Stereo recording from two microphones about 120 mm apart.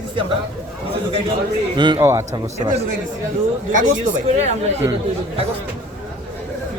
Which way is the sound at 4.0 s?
75° right (ahead or behind).